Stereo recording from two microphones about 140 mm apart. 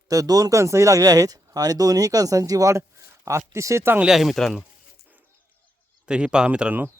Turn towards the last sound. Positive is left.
turn(degrees=-10)  # may be behind; listen again after turning